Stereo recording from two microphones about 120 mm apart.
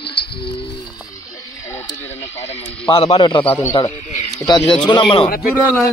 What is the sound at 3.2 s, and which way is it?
Speech, 40° left (ahead or behind).